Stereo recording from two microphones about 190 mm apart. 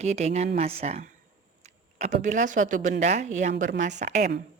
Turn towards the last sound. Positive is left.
turn(degrees=-40)  # may be behind; listen again after turning